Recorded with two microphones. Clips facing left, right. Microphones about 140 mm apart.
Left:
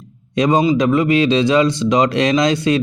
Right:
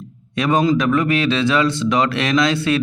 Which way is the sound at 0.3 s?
15° left (ahead or behind).